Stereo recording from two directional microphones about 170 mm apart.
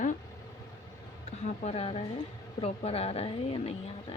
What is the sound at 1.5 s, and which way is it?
A woman's voice, 40° left (ahead or behind).